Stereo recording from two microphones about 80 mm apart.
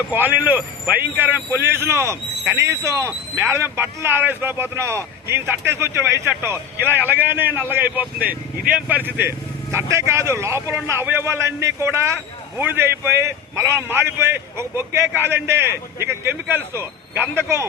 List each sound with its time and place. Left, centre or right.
0.1 s a man's voice: right